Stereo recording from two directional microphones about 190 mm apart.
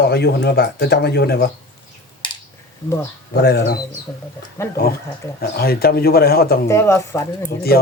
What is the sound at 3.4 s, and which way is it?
Speech, 55° left (ahead or behind).